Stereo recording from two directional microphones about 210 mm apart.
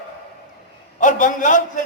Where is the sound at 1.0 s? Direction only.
40° left (ahead or behind).